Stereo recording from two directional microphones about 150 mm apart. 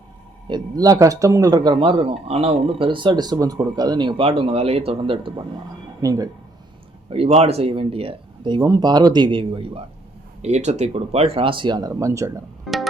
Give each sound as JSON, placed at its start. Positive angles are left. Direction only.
{"t": 0.4, "sound": "speech", "side_deg": -25}
{"t": 6.0, "sound": "speech", "side_deg": -25}
{"t": 7.1, "sound": "speech", "side_deg": -45}
{"t": 10.4, "sound": "speech", "side_deg": -50}
{"t": 12.6, "sound": "music", "side_deg": 0}